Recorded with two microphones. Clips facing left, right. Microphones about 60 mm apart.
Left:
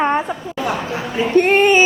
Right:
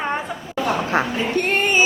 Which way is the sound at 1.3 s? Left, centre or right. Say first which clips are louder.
Left 8 dB; left.